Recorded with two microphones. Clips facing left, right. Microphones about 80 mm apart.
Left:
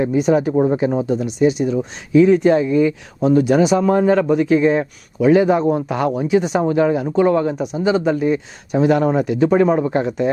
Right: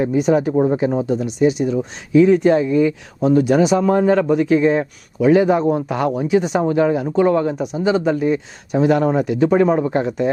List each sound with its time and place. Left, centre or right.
0.0 s speech: centre